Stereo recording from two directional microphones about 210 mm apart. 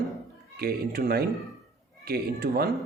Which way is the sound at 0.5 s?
45° right (ahead or behind).